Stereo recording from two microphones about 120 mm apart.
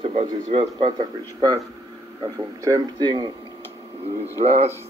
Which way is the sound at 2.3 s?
30° right (ahead or behind).